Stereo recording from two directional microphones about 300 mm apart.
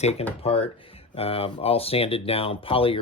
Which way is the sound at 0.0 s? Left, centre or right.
Left.